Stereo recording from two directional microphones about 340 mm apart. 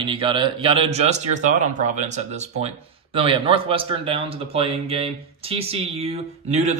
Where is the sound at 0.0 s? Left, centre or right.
Centre.